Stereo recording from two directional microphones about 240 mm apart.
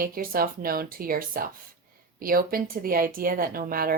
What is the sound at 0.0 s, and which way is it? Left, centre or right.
Speech, right.